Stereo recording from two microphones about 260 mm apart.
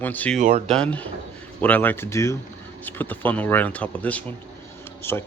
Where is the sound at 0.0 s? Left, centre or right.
Centre.